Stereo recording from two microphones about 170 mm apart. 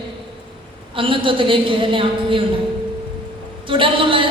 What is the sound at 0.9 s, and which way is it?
A woman's voice, 30° right (ahead or behind).